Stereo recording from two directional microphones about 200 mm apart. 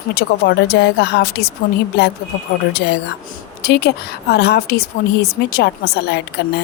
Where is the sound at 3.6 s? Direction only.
55° left (ahead or behind).